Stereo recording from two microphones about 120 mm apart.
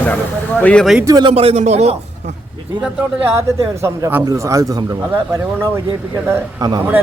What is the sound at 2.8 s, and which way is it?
Speech, 15° right (ahead or behind).